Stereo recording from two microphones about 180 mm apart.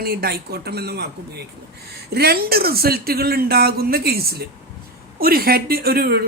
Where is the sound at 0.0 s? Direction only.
60° right (ahead or behind).